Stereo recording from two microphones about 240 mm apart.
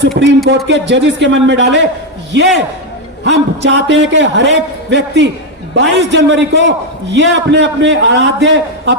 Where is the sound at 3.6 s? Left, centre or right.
Right.